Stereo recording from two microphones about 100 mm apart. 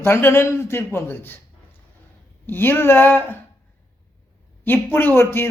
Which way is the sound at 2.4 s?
20° left (ahead or behind).